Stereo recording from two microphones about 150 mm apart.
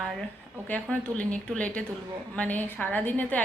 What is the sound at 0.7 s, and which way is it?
A woman's voice, 10° left (ahead or behind).